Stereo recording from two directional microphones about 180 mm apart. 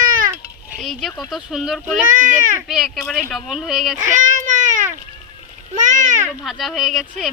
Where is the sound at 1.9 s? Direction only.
45° right (ahead or behind).